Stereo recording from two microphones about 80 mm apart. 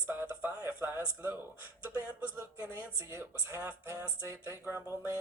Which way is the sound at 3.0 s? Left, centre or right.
Right.